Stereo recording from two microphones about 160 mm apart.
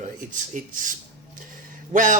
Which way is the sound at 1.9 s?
50° right (ahead or behind).